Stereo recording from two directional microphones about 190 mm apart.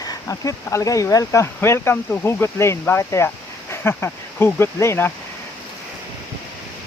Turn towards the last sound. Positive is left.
turn(degrees=15)  # may be behind; listen again after turning